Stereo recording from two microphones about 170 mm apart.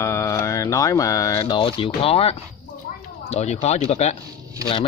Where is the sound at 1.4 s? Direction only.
30° left (ahead or behind).